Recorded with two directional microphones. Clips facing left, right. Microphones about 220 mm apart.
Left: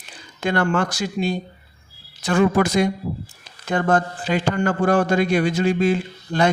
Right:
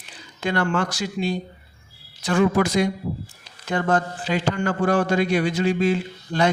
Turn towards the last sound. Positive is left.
turn(degrees=50)  # may be behind; listen again after turning